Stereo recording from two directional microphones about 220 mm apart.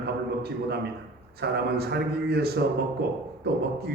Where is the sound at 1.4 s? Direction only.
45° right (ahead or behind).